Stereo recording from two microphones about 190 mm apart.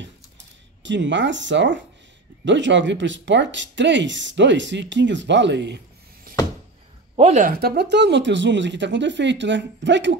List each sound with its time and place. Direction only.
0.8 s speech: 70° right (ahead or behind)
7.2 s speech: 35° right (ahead or behind); by 10.1 s 70° right (ahead or behind)